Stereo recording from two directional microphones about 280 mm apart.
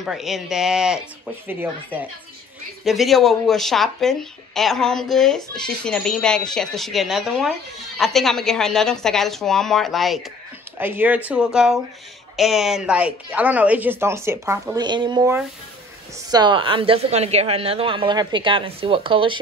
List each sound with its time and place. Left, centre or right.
0.0 s a woman's voice: centre